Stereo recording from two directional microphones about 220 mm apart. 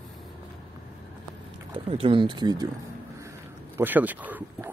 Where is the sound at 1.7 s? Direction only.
25° right (ahead or behind).